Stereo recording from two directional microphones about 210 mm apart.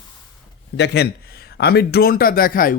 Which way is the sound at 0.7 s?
55° left (ahead or behind).